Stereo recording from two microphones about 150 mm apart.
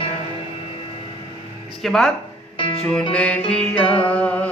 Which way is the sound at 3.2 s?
5° left (ahead or behind).